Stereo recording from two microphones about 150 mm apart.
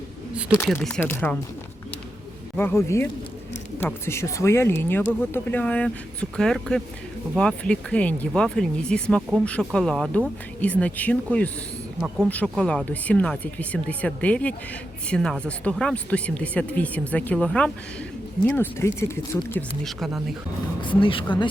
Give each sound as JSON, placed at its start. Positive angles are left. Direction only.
{"t": 0.3, "sound": "speech", "side_deg": -5}
{"t": 0.7, "sound": "speech", "side_deg": 5}
{"t": 2.6, "sound": "speech", "side_deg": 15}
{"t": 12.0, "sound": "speech", "side_deg": -15}
{"t": 12.3, "sound": "speech", "side_deg": 10}
{"t": 19.8, "sound": "speech", "side_deg": 0}
{"t": 20.8, "sound": "speech", "side_deg": 35}